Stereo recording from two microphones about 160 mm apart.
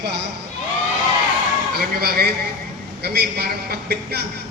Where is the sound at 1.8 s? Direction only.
70° right (ahead or behind).